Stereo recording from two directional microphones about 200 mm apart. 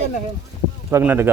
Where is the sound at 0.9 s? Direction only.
10° right (ahead or behind).